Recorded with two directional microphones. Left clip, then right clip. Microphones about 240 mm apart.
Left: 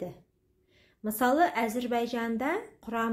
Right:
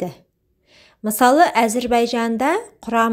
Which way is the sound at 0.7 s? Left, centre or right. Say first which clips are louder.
Right 10 dB; right.